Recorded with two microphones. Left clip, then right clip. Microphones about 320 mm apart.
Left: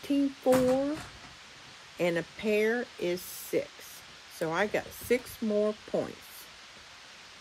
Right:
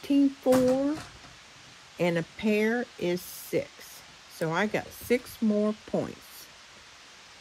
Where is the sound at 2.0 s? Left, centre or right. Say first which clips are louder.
Right 2 dB; right.